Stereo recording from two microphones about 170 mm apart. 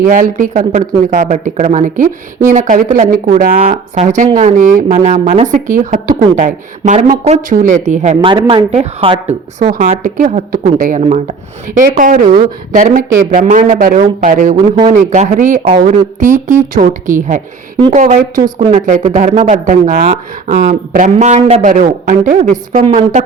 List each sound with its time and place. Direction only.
0.0 s speech: 50° right (ahead or behind); by 9.3 s 35° right (ahead or behind)
9.6 s speech: 50° right (ahead or behind)
11.9 s speech: 55° right (ahead or behind)
12.2 s speech: 30° right (ahead or behind)
12.7 s speech: 50° right (ahead or behind)
22.8 s speech: 35° right (ahead or behind)